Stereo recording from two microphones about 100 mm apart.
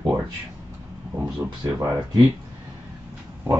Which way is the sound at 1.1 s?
15° right (ahead or behind).